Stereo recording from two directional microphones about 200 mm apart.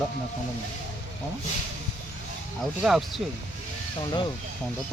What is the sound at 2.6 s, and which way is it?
Speech, centre (ahead or behind).